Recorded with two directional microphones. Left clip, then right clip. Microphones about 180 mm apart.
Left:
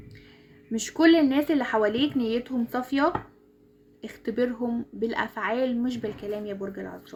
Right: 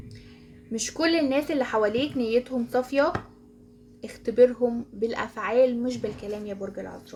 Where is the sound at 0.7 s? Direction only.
45° left (ahead or behind).